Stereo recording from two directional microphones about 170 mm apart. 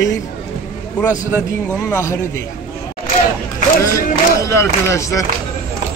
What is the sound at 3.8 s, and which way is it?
Speech, 15° left (ahead or behind).